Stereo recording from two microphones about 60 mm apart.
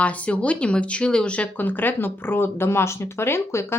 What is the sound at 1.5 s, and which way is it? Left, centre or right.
Speech, left.